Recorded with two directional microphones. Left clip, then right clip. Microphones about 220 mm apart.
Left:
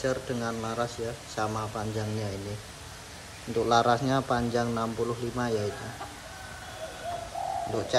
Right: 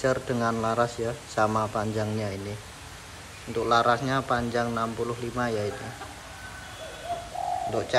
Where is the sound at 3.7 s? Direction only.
20° left (ahead or behind).